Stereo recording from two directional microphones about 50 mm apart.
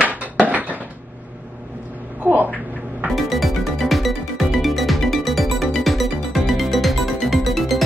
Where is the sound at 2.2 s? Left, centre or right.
Right.